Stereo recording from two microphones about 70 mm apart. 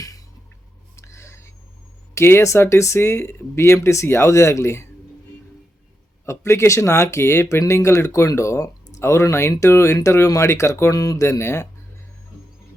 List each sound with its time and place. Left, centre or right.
0.9 s a sound: left
2.1 s speech: left
6.2 s speech: left
10.9 s speech: left